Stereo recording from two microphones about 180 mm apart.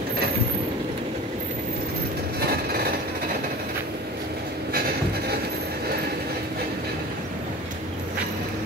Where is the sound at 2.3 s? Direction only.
60° right (ahead or behind).